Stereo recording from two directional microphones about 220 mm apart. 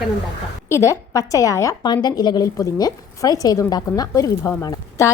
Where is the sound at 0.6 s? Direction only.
15° left (ahead or behind).